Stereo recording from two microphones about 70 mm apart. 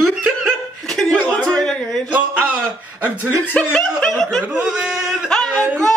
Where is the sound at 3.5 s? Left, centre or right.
Centre.